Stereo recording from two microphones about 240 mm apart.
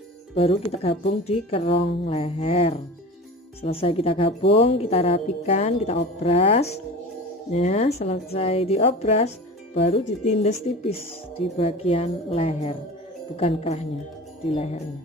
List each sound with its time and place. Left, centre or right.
0.3 s a woman's voice: left